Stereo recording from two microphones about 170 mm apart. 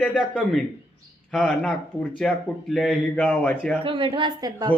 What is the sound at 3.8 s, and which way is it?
Speech, 30° right (ahead or behind).